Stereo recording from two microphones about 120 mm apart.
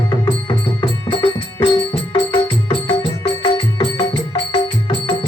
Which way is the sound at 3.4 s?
45° left (ahead or behind).